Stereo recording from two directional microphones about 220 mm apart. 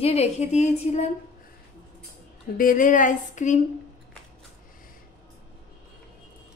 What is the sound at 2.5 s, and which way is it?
Speech, 40° left (ahead or behind).